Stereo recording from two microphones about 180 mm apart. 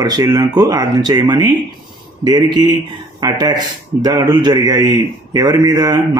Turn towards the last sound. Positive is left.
turn(degrees=-20)  # may be behind; listen again after turning